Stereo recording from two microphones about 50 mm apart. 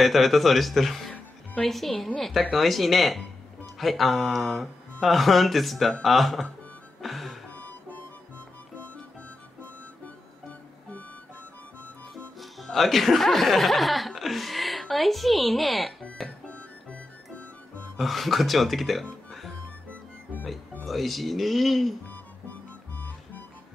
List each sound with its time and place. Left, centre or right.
0.0 s speech: centre
7.0 s music: centre
7.5 s music: left
12.4 s speech: centre
16.3 s music: left
17.9 s speech: centre
20.8 s speech: centre
22.0 s music: left